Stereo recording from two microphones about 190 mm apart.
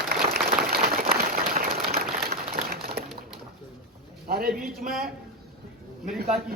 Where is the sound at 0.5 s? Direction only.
55° right (ahead or behind).